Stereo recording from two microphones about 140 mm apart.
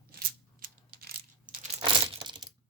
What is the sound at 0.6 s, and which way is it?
Coin, 90° right.